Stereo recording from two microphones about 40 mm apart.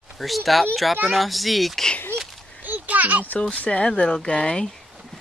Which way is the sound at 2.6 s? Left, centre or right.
Right.